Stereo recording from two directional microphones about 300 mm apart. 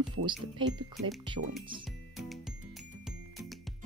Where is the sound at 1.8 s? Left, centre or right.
Centre.